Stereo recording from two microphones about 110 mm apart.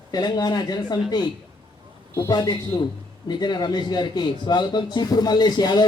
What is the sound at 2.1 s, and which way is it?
A man's voice, 35° left (ahead or behind).